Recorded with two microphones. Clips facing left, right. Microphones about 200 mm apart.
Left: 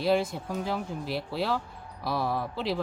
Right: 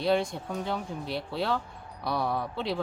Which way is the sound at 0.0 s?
5° left (ahead or behind).